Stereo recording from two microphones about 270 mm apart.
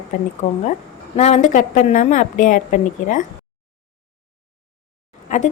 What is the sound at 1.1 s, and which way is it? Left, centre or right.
A woman's voice, left.